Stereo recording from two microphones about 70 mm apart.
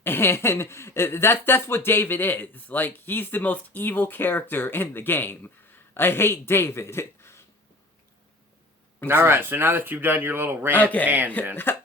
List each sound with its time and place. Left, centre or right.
0.0 s speech: left
9.0 s speech: right
11.5 s speech: left